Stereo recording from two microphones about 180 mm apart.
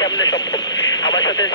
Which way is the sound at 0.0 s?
20° left (ahead or behind).